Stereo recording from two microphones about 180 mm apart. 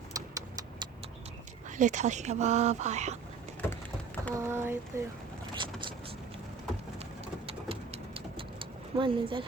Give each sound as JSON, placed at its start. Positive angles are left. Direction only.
{"t": 0.1, "sound": "a sound", "side_deg": -20}
{"t": 1.7, "sound": "speech", "side_deg": -40}
{"t": 3.6, "sound": "a sound", "side_deg": 10}
{"t": 4.4, "sound": "speech", "side_deg": -15}
{"t": 7.4, "sound": "vehicle", "side_deg": -30}
{"t": 9.0, "sound": "speech", "side_deg": -30}